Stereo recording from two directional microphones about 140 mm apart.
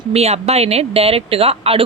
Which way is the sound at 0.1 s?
45° right (ahead or behind).